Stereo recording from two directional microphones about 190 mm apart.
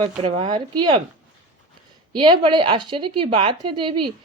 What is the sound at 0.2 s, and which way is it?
Speech, 25° right (ahead or behind).